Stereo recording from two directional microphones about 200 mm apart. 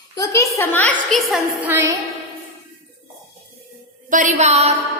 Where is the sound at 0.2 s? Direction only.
15° left (ahead or behind).